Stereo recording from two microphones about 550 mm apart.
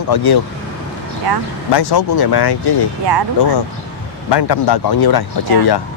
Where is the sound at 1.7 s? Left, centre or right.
Left.